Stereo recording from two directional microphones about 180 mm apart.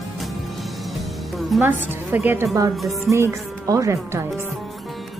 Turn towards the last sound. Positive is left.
turn(degrees=-15)  # may be behind; listen again after turning